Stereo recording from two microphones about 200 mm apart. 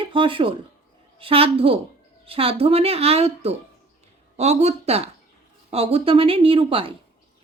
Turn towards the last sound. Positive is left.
turn(degrees=-25)  # may be behind; listen again after turning